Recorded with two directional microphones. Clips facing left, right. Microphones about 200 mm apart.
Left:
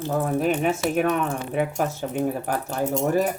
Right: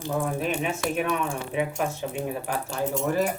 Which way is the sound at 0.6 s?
45° left (ahead or behind).